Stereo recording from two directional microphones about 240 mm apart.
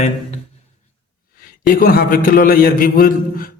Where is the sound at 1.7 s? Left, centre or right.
Left.